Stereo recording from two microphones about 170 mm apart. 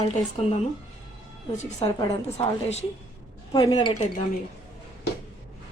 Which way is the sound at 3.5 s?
25° left (ahead or behind).